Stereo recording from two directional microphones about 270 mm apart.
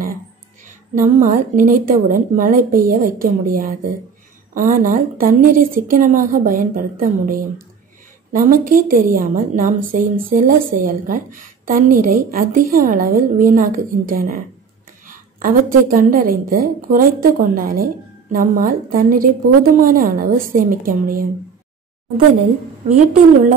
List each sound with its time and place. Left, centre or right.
0.7 s a woman's voice: right